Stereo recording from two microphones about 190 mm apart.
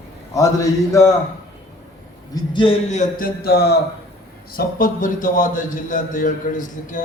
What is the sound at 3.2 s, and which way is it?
Speech, 55° left (ahead or behind).